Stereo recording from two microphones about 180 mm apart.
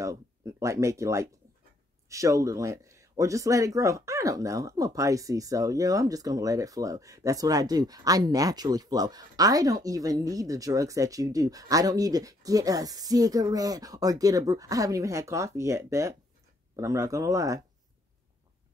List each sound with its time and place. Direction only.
0.0 s speech: 15° right (ahead or behind)